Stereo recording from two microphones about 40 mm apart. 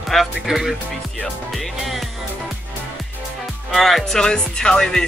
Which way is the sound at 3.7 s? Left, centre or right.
Centre.